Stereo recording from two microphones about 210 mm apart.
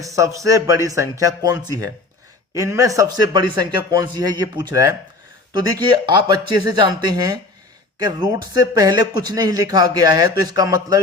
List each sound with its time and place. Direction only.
0.0 s a man's voice: 15° right (ahead or behind)